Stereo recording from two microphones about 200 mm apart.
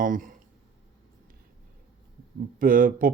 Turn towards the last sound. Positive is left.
turn(degrees=-45)  # may be behind; listen again after turning